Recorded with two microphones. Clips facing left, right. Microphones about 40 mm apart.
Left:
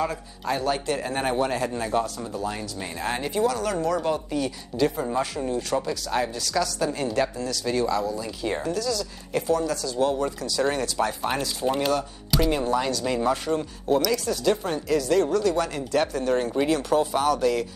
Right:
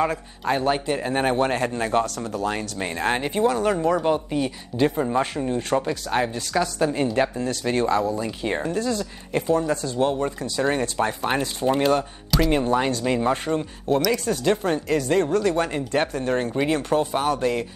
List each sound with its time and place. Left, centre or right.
0.0 s speech: right
1.4 s speech: right
11.6 s speech: centre
12.4 s speech: right
14.1 s speech: right